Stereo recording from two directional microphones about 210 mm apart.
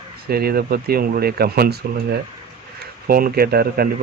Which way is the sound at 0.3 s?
45° right (ahead or behind).